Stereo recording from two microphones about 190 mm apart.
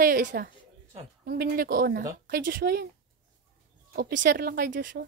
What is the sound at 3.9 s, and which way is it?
A woman's voice, 55° right (ahead or behind).